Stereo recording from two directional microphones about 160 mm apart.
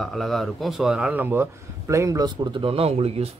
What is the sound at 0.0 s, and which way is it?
Speech, centre (ahead or behind).